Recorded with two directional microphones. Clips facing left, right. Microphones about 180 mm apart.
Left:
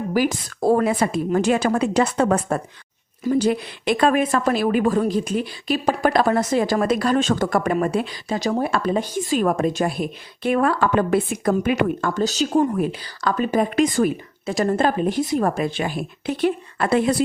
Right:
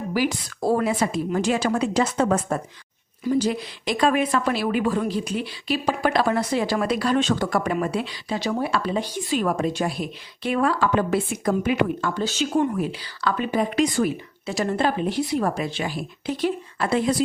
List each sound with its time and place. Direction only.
0.1 s a woman's voice: 50° left (ahead or behind)